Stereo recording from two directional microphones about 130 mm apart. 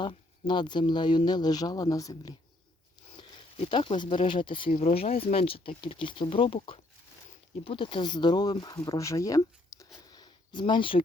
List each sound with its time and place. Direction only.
0.0 s speech: 35° left (ahead or behind)
3.6 s speech: 40° left (ahead or behind)
4.8 s speech: 55° left (ahead or behind); by 9.8 s 25° left (ahead or behind)
10.0 s a sound: 30° left (ahead or behind)